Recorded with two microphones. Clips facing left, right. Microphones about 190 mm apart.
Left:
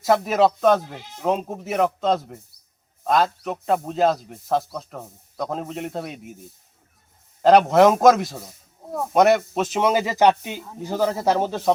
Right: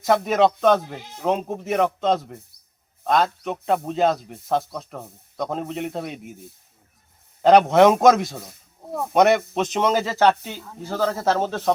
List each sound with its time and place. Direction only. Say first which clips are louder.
0.0 s speech: even; centre (ahead or behind)
7.4 s speech: even; centre (ahead or behind)